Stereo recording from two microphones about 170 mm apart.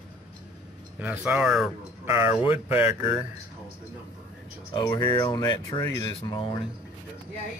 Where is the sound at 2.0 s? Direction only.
15° right (ahead or behind).